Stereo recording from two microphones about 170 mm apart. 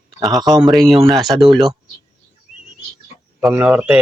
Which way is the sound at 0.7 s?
Centre (ahead or behind).